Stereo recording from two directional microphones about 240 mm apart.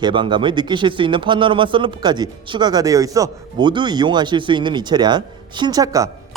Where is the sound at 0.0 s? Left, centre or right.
Centre.